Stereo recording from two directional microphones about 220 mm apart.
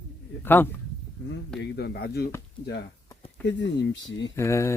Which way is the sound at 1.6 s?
45° left (ahead or behind).